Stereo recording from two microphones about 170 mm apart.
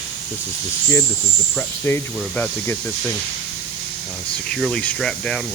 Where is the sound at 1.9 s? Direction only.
10° left (ahead or behind).